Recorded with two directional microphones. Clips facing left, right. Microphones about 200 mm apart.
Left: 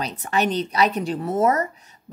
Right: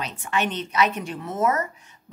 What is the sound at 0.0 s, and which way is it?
A woman's voice, 35° left (ahead or behind).